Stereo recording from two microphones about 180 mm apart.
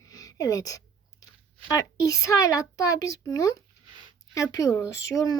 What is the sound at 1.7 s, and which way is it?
Speech, 20° left (ahead or behind).